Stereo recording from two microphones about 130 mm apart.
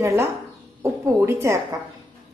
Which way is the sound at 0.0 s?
20° right (ahead or behind).